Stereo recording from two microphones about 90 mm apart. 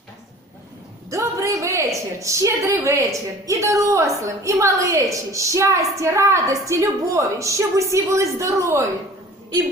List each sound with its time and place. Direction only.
1.1 s speech: 35° right (ahead or behind)